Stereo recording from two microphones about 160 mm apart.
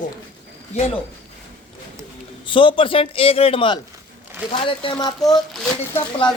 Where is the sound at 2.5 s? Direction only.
30° left (ahead or behind).